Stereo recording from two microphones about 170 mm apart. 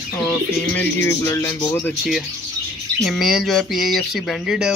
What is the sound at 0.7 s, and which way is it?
Speech, 10° left (ahead or behind).